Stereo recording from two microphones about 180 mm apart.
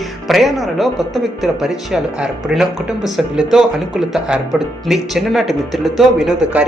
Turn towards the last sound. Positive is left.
turn(degrees=0)  # may be behind; listen again after turning